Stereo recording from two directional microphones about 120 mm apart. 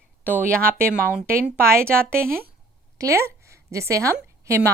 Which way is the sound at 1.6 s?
20° right (ahead or behind).